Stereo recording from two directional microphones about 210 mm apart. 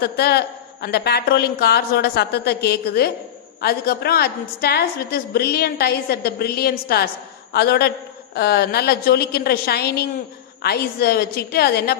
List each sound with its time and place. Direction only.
0.0 s a woman's voice: 50° left (ahead or behind)